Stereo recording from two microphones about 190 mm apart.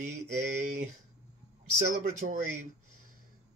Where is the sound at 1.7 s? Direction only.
45° right (ahead or behind).